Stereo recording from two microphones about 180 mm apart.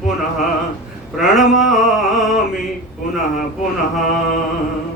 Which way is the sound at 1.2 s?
Centre (ahead or behind).